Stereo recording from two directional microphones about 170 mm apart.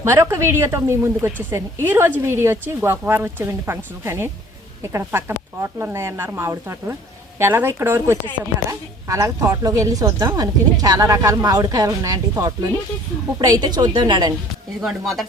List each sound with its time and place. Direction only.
0.0 s a woman's voice: 15° right (ahead or behind)
14.8 s speech: centre (ahead or behind)